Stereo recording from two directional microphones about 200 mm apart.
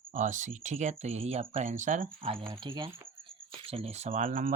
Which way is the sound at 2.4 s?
20° right (ahead or behind).